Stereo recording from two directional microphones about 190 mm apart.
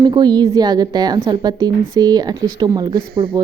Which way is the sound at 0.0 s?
20° right (ahead or behind).